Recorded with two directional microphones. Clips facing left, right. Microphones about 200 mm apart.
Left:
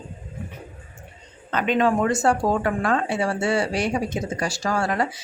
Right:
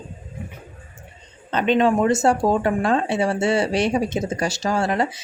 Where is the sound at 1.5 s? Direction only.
25° right (ahead or behind).